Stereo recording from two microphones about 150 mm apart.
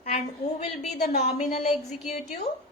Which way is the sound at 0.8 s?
50° left (ahead or behind).